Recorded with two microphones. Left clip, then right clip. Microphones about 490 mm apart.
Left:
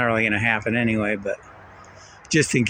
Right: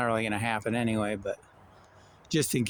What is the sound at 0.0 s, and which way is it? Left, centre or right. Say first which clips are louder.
Speech: left 8 dB; right.